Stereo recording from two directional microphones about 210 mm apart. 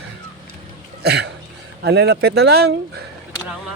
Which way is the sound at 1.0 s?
50° right (ahead or behind).